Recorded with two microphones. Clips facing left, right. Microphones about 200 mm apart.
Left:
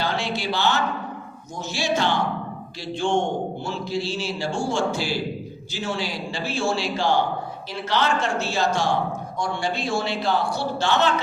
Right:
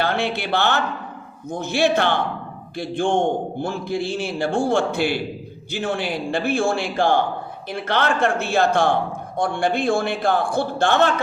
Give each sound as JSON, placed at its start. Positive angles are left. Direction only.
{"t": 0.0, "sound": "a man's voice", "side_deg": -60}